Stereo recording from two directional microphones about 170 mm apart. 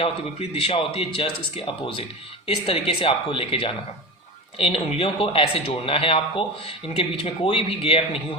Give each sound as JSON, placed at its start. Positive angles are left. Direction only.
{"t": 0.0, "sound": "speech", "side_deg": 35}